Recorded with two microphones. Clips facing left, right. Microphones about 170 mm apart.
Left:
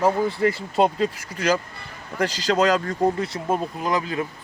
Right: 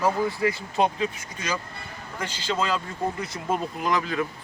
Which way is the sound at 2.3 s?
40° left (ahead or behind).